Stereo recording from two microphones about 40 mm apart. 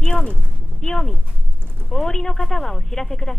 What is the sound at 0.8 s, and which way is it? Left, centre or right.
Speech, centre.